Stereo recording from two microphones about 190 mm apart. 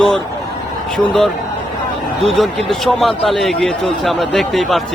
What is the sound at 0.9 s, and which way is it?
A man's voice, 5° left (ahead or behind).